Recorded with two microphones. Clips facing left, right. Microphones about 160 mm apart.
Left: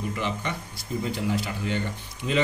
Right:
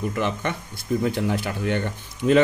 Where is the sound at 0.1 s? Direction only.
55° right (ahead or behind).